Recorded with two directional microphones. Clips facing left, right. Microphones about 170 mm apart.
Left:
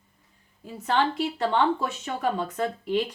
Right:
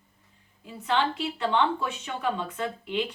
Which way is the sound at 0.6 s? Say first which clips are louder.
Left 2 dB; 45° left (ahead or behind).